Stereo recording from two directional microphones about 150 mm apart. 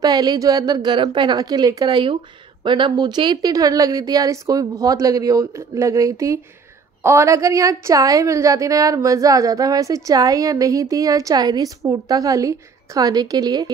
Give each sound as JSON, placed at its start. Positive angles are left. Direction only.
{"t": 0.0, "sound": "a woman's voice", "side_deg": -25}